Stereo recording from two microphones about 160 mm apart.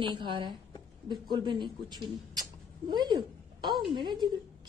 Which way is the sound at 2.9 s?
25° right (ahead or behind).